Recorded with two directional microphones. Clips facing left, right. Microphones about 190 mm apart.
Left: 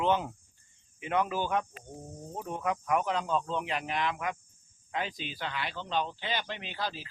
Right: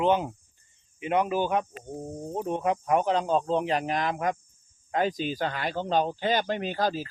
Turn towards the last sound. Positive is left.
turn(degrees=-45)  # may be behind; listen again after turning